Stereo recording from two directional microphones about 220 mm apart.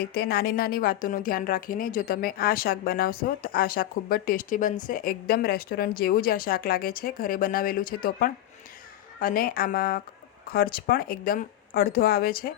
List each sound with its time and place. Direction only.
0.0 s speech: 45° left (ahead or behind)